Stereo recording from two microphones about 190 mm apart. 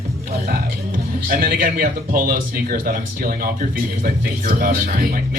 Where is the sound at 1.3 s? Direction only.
50° right (ahead or behind).